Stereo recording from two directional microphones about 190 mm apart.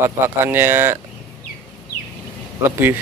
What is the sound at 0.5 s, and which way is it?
Speech, 10° right (ahead or behind).